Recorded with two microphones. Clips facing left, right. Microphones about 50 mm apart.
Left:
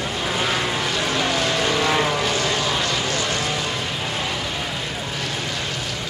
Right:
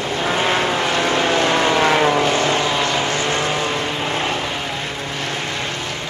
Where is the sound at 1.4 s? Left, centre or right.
Right.